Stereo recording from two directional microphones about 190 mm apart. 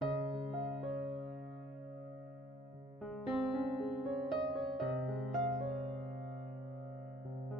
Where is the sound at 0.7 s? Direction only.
Centre (ahead or behind).